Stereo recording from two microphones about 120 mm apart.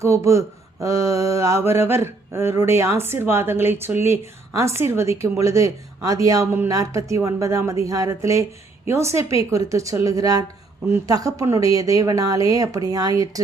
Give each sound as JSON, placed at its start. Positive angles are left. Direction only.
{"t": 0.0, "sound": "mantra", "side_deg": -25}